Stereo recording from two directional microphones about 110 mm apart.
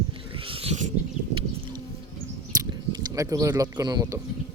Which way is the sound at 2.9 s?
30° right (ahead or behind).